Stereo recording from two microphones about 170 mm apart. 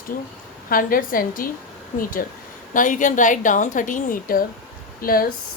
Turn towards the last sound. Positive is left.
turn(degrees=60)  # may be behind; listen again after turning